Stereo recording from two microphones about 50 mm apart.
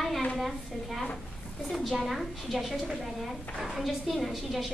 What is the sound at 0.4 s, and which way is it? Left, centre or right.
A woman's voice, centre.